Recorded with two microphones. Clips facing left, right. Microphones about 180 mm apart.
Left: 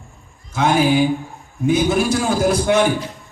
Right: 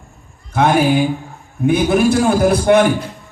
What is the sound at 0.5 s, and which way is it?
A man's voice, 55° right (ahead or behind).